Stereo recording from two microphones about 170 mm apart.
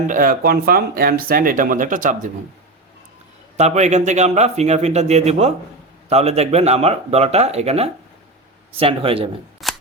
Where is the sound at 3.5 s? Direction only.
40° right (ahead or behind).